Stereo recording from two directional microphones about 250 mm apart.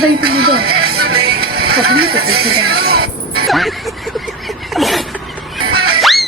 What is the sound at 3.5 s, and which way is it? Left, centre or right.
Speech, centre.